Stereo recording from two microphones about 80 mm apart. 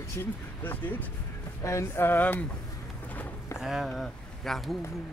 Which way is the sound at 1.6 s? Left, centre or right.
Left.